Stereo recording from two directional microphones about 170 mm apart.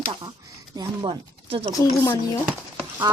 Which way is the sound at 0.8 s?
30° right (ahead or behind).